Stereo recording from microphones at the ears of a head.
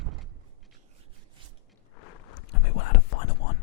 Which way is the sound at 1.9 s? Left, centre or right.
Left.